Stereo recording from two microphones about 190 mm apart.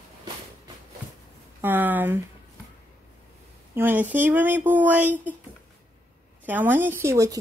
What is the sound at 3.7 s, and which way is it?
A woman's voice, 10° right (ahead or behind).